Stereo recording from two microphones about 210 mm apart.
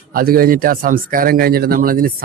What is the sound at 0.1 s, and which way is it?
Speech, 45° right (ahead or behind).